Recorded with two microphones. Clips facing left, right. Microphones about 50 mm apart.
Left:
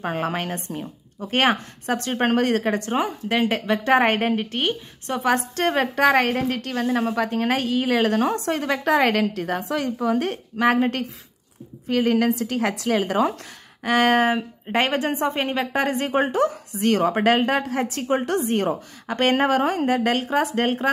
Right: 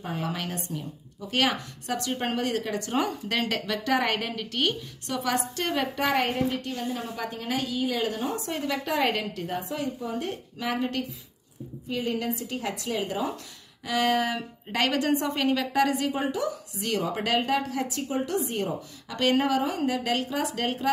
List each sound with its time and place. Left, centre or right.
0.0 s a woman's voice: left
3.0 s a woman's voice: centre; by 11.1 s left
11.9 s a woman's voice: left
13.8 s a woman's voice: left
14.3 s a woman's voice: left